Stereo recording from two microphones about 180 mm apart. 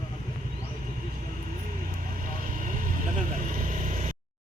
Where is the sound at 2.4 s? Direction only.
50° right (ahead or behind).